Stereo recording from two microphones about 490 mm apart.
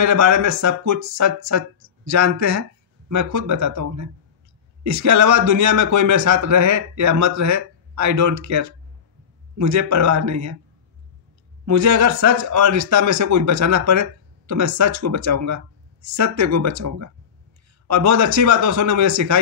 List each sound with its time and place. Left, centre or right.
0.0 s speech: right
11.6 s speech: right